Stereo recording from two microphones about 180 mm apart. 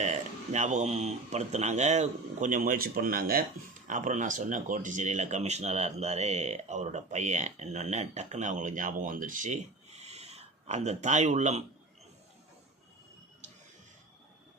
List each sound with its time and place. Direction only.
0.0 s speech: 40° right (ahead or behind)